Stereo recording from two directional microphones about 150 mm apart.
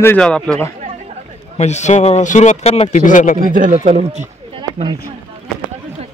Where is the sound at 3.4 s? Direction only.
65° right (ahead or behind); by 4.8 s 45° right (ahead or behind).